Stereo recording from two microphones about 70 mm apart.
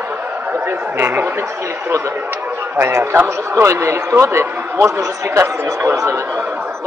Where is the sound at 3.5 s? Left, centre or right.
Right.